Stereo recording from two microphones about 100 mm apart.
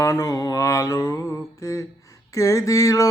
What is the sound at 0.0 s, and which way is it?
Mantra, 30° left (ahead or behind).